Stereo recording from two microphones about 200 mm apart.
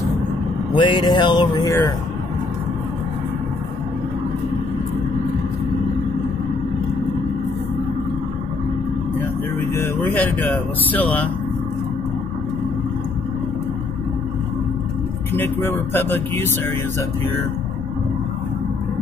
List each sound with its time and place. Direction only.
0.7 s music: 25° left (ahead or behind)
9.8 s speech: 10° left (ahead or behind)
15.3 s speech: 10° left (ahead or behind)